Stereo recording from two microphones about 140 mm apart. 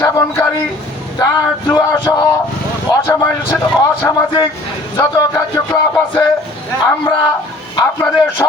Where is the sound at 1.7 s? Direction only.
30° left (ahead or behind).